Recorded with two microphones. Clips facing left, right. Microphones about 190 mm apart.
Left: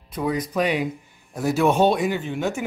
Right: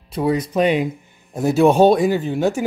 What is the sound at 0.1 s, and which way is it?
Speech, 30° right (ahead or behind).